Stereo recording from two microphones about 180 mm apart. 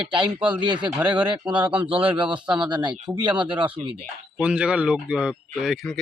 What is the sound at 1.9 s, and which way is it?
Speech, 30° right (ahead or behind).